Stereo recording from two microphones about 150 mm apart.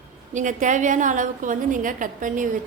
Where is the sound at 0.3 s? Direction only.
55° right (ahead or behind).